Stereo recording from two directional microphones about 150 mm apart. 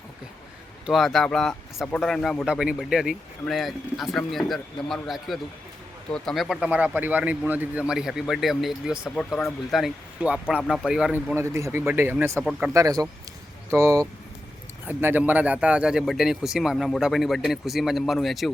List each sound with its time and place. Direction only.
0.9 s speech: centre (ahead or behind)
11.3 s speech: 20° right (ahead or behind)
12.4 s speech: 5° right (ahead or behind)
12.7 s speech: 25° right (ahead or behind); by 18.5 s centre (ahead or behind)